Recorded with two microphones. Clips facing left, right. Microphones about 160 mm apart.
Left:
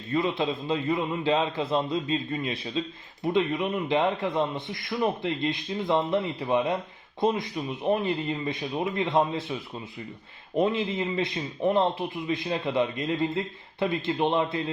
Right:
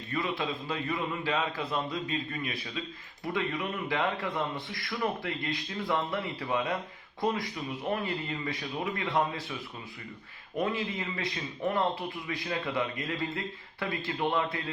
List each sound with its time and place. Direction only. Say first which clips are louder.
0.1 s speech: left 6 dB; 25° left (ahead or behind)